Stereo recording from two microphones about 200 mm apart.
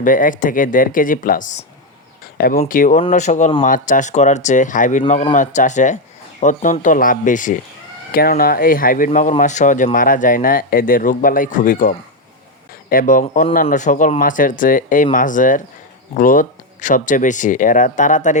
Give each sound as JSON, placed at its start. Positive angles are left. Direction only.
{"t": 0.0, "sound": "speech", "side_deg": 40}